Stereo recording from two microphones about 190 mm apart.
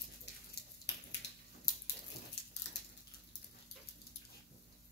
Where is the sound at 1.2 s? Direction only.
65° left (ahead or behind).